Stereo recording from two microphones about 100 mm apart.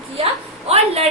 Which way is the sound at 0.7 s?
90° right.